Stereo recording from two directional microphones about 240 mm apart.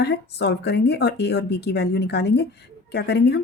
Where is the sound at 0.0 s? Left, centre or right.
Left.